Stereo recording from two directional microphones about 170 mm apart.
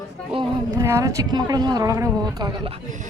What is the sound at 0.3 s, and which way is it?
A woman's voice, 20° right (ahead or behind).